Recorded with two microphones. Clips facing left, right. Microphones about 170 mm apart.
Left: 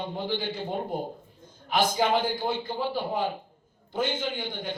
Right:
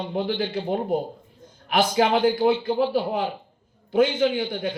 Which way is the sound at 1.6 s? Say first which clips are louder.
Right 4 dB; 70° right (ahead or behind).